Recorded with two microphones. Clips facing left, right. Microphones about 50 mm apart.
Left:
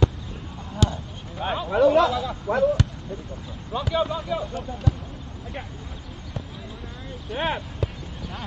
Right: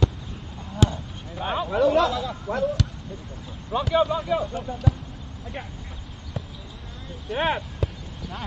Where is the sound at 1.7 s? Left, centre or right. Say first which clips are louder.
Left 3 dB; centre.